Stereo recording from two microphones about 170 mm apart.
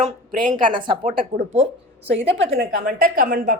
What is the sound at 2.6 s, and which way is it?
Speech, 50° right (ahead or behind).